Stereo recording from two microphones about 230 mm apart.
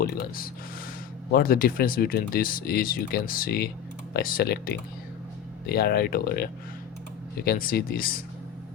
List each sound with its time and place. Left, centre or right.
0.0 s speech: left